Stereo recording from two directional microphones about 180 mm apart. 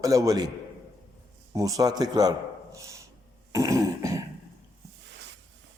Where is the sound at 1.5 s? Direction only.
20° right (ahead or behind).